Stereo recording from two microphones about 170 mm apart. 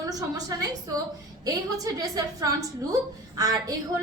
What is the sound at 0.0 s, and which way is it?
A woman's voice, 20° right (ahead or behind).